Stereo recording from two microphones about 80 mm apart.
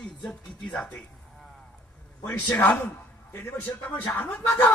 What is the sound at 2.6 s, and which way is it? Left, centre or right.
A man's voice, left.